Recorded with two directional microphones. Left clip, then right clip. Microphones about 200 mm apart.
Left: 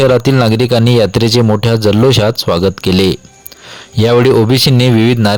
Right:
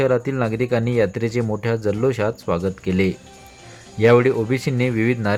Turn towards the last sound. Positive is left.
turn(degrees=35)  # may be behind; listen again after turning